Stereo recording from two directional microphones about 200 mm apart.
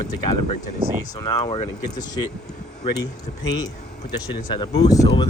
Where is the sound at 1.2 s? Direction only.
25° left (ahead or behind).